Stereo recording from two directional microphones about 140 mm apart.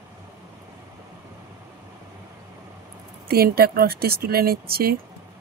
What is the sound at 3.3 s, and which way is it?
Speech, 90° right.